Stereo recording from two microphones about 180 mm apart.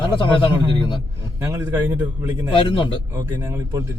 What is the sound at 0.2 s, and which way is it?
Speech, 25° left (ahead or behind).